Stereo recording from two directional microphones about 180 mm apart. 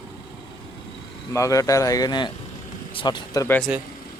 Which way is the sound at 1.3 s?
20° left (ahead or behind).